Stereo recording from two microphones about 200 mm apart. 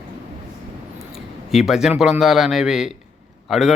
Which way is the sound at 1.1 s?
Centre (ahead or behind).